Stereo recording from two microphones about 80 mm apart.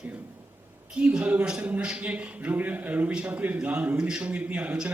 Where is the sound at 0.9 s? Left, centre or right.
Centre.